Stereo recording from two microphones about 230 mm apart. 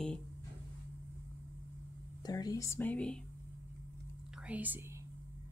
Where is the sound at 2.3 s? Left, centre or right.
Centre.